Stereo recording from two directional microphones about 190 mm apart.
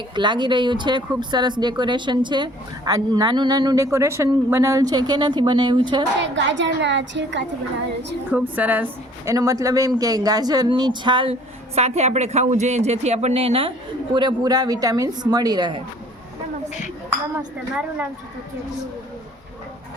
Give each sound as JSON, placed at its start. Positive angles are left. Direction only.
{"t": 0.2, "sound": "a woman's voice", "side_deg": -25}
{"t": 6.2, "sound": "a child's voice", "side_deg": -70}
{"t": 8.3, "sound": "a woman's voice", "side_deg": -10}